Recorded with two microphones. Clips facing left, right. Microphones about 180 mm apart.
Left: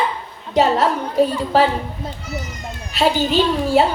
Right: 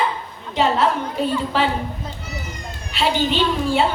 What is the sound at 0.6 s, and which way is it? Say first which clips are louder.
A woman's voice: left 3 dB; 40° left (ahead or behind).